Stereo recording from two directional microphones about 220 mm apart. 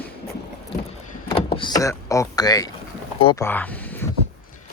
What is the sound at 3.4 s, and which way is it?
Speech, 10° left (ahead or behind).